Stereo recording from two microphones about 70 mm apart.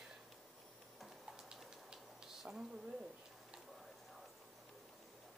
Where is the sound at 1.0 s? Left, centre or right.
Centre.